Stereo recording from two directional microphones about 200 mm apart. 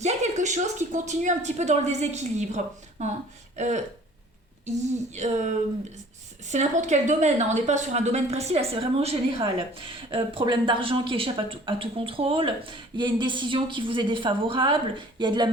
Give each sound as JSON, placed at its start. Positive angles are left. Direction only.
{"t": 0.0, "sound": "a woman's voice", "side_deg": -35}
{"t": 5.1, "sound": "a woman's voice", "side_deg": -35}